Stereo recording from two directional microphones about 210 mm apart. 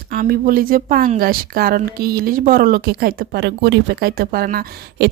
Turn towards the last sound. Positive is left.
turn(degrees=-50)  # may be behind; listen again after turning